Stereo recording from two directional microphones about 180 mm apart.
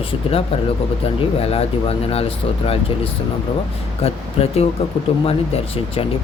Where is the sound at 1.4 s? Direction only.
35° left (ahead or behind).